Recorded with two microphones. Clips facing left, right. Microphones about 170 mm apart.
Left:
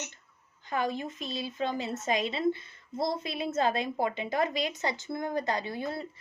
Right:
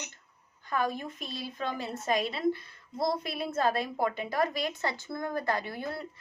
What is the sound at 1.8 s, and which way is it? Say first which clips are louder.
Speech: even; 20° left (ahead or behind).